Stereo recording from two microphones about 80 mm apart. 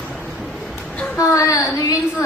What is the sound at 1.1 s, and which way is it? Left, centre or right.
Speech, left.